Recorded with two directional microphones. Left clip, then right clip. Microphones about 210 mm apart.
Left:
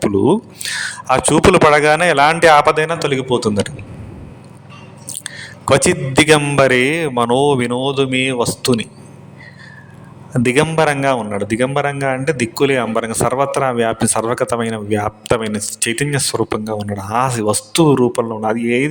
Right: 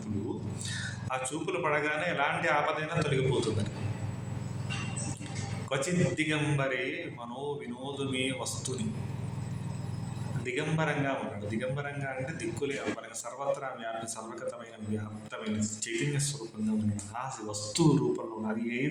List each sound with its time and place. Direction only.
0.6 s a man's voice: 55° left (ahead or behind)
5.6 s a man's voice: 55° left (ahead or behind)
10.4 s a man's voice: 60° left (ahead or behind)